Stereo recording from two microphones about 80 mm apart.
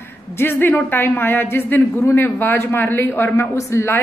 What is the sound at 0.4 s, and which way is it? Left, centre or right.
A woman's voice, left.